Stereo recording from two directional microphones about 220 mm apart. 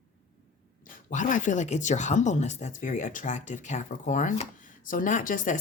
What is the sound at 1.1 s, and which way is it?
Speech, 35° left (ahead or behind).